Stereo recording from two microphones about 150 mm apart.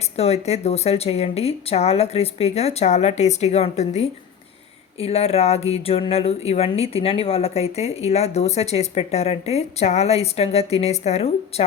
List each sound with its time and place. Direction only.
0.2 s speech: 45° left (ahead or behind)